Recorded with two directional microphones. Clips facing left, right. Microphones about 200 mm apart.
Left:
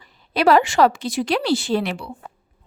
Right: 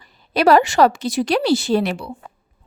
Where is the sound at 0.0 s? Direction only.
40° right (ahead or behind).